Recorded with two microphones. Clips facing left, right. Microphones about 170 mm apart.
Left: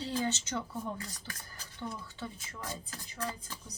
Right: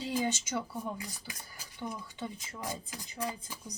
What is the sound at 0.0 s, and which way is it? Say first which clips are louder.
Speech: right 1 dB; 15° right (ahead or behind).